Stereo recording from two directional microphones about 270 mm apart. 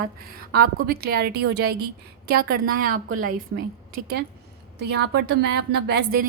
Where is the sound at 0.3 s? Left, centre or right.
Right.